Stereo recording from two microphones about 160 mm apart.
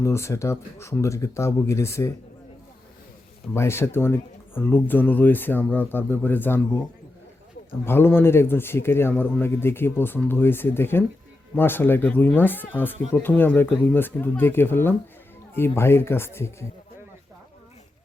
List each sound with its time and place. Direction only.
0.0 s speech: 15° left (ahead or behind)
3.5 s speech: 15° left (ahead or behind)
7.9 s speech: 15° left (ahead or behind)